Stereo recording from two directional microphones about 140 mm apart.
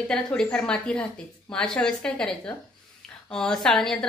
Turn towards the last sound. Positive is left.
turn(degrees=5)  # may be behind; listen again after turning